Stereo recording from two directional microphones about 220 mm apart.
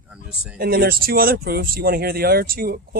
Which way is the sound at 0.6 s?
45° right (ahead or behind).